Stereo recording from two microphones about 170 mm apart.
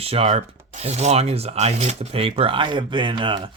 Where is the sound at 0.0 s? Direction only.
35° right (ahead or behind).